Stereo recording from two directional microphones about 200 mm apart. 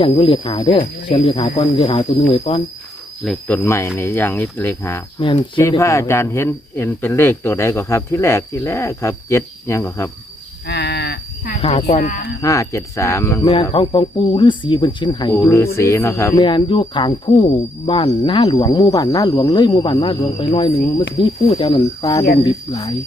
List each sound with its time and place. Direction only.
0.0 s speech: 25° left (ahead or behind)
3.2 s speech: 5° left (ahead or behind)
5.2 s speech: 25° left (ahead or behind)
5.5 s speech: 15° left (ahead or behind)
10.7 s livestock: 55° left (ahead or behind)
11.9 s speech: 35° left (ahead or behind)
12.4 s speech: 15° left (ahead or behind)
13.5 s speech: 25° left (ahead or behind)